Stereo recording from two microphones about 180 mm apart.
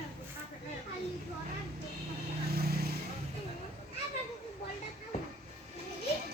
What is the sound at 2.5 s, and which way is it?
Vehicle, 60° right (ahead or behind).